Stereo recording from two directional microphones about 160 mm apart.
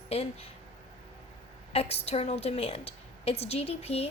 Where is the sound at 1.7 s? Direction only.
40° left (ahead or behind).